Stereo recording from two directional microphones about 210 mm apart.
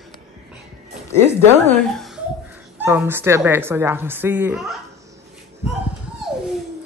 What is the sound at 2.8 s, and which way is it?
Speech, 10° right (ahead or behind).